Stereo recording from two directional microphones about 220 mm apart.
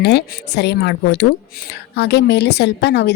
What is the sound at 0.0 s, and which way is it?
A woman's voice, 50° left (ahead or behind).